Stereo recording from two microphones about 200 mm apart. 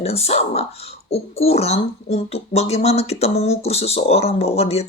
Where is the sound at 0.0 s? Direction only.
30° left (ahead or behind).